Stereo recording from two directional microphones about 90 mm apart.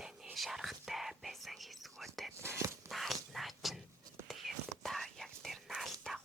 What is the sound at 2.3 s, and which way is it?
Whispering, 30° right (ahead or behind).